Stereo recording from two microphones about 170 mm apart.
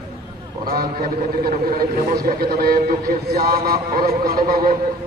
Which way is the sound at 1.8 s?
60° right (ahead or behind).